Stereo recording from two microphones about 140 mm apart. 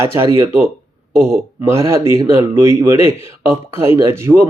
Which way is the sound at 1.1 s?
5° left (ahead or behind).